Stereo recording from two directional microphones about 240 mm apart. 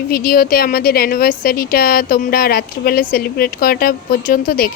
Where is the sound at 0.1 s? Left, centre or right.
Left.